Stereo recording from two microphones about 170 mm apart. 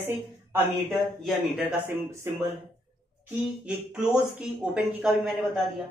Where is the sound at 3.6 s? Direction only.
5° right (ahead or behind).